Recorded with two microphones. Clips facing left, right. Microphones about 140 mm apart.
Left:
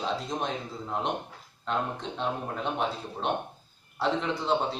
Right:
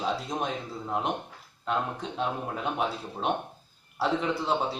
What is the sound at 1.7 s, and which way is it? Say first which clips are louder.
Speech: right 1 dB; 5° right (ahead or behind).